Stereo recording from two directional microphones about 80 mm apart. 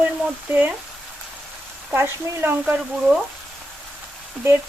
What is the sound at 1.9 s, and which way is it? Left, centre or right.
Speech, right.